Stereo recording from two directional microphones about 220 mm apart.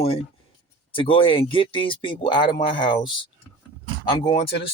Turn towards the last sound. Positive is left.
turn(degrees=20)  # may be behind; listen again after turning